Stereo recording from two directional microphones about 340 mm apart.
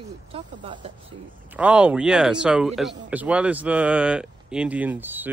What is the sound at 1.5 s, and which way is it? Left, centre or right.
Speech, centre.